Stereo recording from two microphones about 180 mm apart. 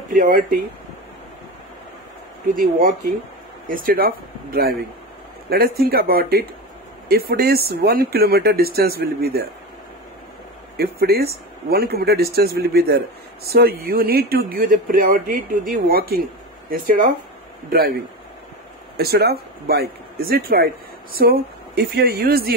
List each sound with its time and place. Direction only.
0.1 s speech: 50° right (ahead or behind)
2.5 s speech: 50° right (ahead or behind)
10.8 s speech: 60° right (ahead or behind)
18.9 s speech: 60° right (ahead or behind)